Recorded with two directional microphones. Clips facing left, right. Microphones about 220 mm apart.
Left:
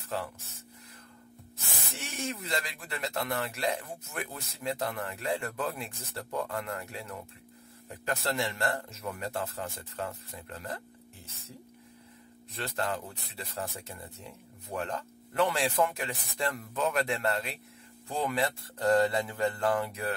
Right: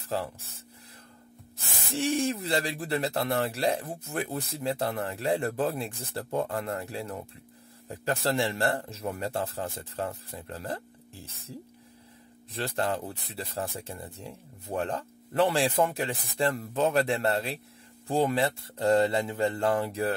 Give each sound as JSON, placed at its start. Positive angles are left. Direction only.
{"t": 2.0, "sound": "speech", "side_deg": -30}
{"t": 12.5, "sound": "speech", "side_deg": -30}